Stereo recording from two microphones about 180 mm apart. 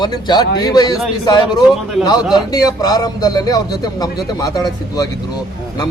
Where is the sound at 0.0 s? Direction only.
25° left (ahead or behind).